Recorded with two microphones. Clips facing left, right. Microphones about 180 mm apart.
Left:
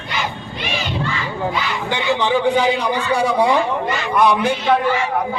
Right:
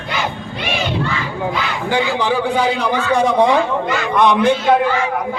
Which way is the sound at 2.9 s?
10° left (ahead or behind).